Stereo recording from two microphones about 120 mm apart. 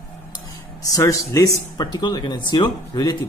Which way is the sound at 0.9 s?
25° left (ahead or behind).